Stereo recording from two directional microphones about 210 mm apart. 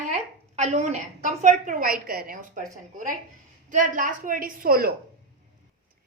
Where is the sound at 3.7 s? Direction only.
40° right (ahead or behind).